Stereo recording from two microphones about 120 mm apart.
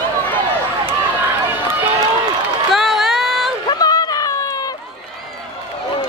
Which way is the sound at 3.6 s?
35° left (ahead or behind).